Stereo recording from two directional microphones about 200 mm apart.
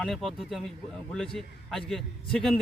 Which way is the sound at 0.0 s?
Centre (ahead or behind).